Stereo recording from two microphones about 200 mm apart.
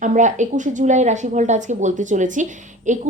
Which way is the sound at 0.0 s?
35° right (ahead or behind).